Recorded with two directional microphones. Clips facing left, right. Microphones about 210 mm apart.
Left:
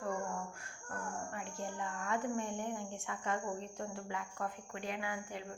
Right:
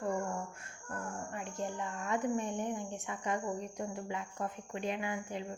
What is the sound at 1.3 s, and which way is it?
Speech, 20° right (ahead or behind).